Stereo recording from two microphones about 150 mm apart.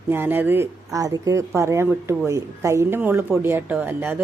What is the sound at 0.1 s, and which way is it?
Speech, 15° right (ahead or behind).